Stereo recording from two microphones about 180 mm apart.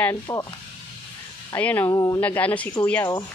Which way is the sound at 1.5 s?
10° left (ahead or behind).